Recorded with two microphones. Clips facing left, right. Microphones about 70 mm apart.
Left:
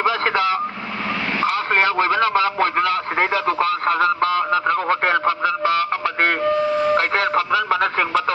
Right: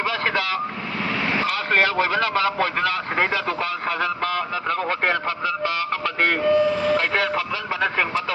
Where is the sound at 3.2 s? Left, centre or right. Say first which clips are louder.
Left 4 dB; left.